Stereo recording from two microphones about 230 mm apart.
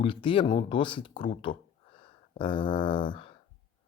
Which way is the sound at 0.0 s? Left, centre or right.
Left.